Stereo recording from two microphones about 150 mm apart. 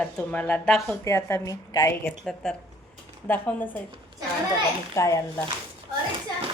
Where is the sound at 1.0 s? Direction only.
20° left (ahead or behind).